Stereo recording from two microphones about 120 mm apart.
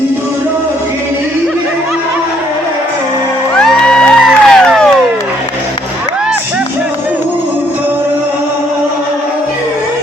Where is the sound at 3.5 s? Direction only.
5° left (ahead or behind).